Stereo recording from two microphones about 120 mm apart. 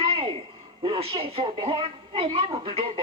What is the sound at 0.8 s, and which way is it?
A woman's voice, 50° right (ahead or behind).